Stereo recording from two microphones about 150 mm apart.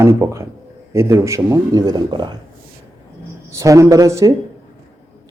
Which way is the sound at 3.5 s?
20° right (ahead or behind).